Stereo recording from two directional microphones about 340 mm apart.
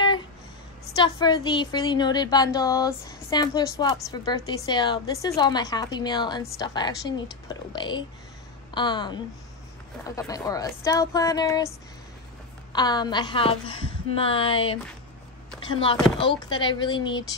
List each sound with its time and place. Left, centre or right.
1.0 s a woman's voice: centre
12.7 s a woman's voice: centre
16.2 s a woman's voice: centre